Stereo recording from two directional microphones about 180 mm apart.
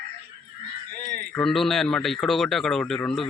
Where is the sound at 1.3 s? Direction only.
5° left (ahead or behind).